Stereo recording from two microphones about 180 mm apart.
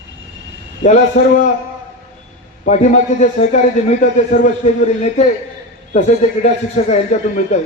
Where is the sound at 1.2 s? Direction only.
40° left (ahead or behind).